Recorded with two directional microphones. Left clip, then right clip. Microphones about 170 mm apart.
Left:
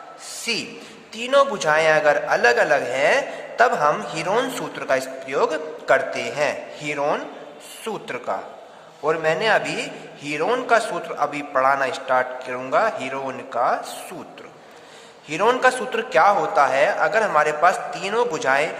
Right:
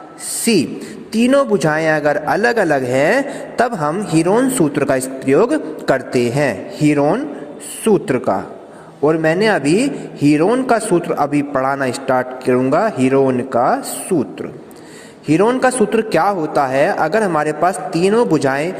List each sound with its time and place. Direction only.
0.5 s a man's voice: 40° right (ahead or behind)